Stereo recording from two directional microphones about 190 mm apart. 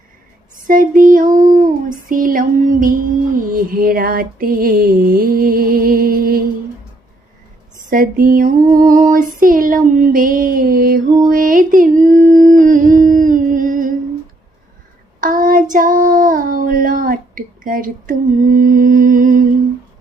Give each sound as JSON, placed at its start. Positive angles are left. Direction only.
{"t": 0.7, "sound": "music", "side_deg": -45}
{"t": 7.9, "sound": "music", "side_deg": -45}
{"t": 11.3, "sound": "a sound", "side_deg": -45}
{"t": 15.2, "sound": "child singing", "side_deg": -45}